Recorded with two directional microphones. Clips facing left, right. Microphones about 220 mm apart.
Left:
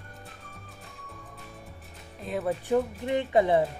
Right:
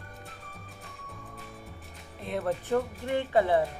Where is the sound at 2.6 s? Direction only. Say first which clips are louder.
Left 2 dB; 15° left (ahead or behind).